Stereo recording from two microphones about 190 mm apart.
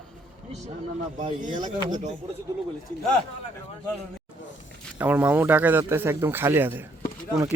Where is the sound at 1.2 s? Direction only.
40° right (ahead or behind).